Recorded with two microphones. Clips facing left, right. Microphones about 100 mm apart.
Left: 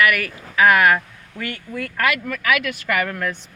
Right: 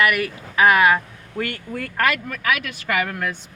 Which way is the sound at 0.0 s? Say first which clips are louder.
Left 1 dB; 25° right (ahead or behind).